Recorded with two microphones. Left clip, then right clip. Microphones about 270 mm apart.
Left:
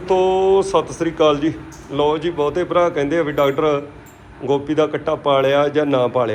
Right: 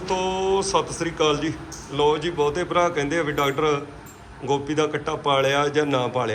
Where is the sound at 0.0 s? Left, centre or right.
Centre.